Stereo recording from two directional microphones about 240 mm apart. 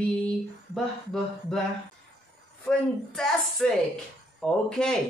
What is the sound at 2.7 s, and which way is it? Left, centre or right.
Female singing, centre.